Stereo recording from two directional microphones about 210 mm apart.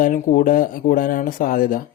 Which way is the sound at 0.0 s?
40° left (ahead or behind).